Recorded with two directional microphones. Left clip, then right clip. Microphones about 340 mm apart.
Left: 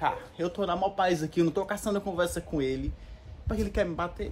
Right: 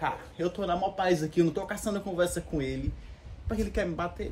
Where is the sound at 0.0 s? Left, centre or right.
Centre.